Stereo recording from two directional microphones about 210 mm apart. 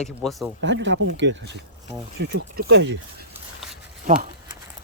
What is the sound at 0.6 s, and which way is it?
Speech, 60° right (ahead or behind).